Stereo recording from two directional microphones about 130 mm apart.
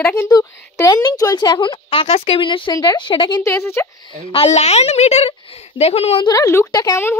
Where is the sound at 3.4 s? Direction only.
20° left (ahead or behind).